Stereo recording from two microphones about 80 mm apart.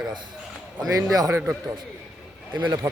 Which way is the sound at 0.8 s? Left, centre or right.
Right.